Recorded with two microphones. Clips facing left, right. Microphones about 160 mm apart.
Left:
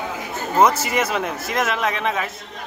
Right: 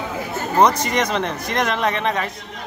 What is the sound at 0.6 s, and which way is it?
Speech, 5° left (ahead or behind).